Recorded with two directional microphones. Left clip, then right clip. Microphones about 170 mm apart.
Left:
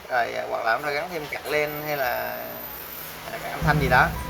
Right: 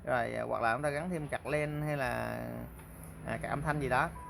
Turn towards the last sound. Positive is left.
turn(degrees=-35)  # may be behind; listen again after turning